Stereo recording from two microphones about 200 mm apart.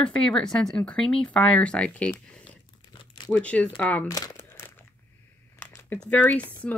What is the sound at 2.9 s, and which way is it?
Crumpling, 25° left (ahead or behind).